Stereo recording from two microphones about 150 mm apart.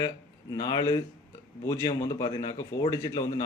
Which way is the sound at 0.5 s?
25° left (ahead or behind).